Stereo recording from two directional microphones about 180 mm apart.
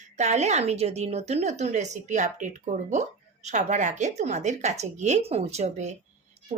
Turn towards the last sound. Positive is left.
turn(degrees=-40)  # may be behind; listen again after turning